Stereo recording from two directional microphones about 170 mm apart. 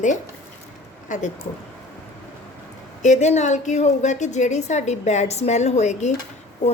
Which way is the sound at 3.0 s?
45° left (ahead or behind).